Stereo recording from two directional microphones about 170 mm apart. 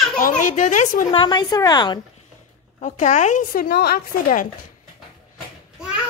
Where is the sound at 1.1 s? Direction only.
25° left (ahead or behind).